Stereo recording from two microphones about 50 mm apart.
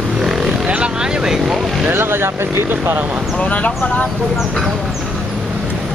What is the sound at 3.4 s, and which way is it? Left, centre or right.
Speech, left.